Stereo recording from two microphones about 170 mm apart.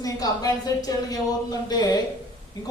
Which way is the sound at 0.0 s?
20° left (ahead or behind).